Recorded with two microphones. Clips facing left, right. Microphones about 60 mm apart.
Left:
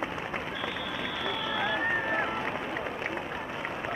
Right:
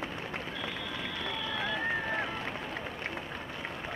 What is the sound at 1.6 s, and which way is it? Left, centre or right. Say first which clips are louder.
Run: left 4 dB; centre.